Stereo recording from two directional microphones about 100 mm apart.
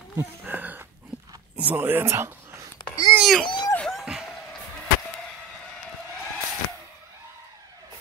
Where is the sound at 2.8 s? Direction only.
45° left (ahead or behind).